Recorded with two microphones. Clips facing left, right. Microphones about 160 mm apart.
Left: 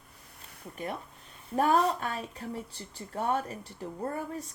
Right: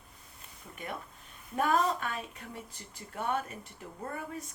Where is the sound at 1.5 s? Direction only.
35° left (ahead or behind).